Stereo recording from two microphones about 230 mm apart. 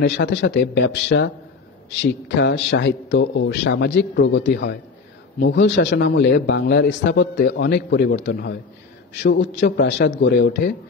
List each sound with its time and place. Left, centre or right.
0.0 s a man's voice: left
5.5 s a man's voice: left